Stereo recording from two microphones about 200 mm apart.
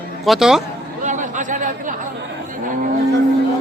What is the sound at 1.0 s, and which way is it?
Chatter, 40° right (ahead or behind).